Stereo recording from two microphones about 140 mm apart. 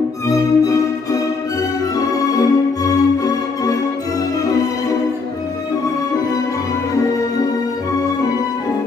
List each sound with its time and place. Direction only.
0.3 s violin: 25° left (ahead or behind)
2.0 s music: 25° left (ahead or behind)